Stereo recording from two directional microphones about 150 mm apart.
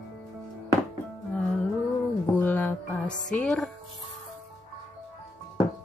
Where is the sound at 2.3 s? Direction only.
10° left (ahead or behind).